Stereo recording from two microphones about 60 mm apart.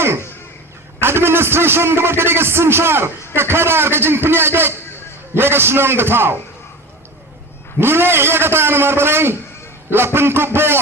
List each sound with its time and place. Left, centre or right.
1.0 s a man's voice: right
7.8 s a man's voice: right